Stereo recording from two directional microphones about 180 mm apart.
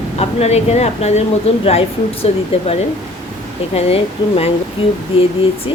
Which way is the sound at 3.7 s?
35° left (ahead or behind).